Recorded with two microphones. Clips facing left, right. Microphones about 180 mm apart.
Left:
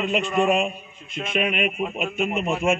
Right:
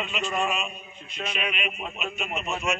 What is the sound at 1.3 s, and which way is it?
A man's voice, 50° left (ahead or behind).